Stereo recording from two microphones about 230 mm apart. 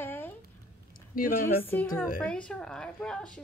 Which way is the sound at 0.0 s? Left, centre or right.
Centre.